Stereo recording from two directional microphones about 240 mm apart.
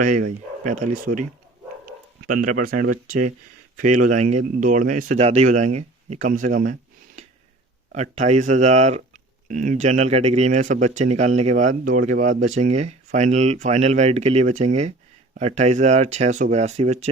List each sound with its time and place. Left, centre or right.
0.0 s speech: right
7.9 s speech: right